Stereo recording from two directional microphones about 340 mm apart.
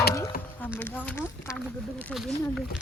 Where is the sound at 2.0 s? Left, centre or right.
Centre.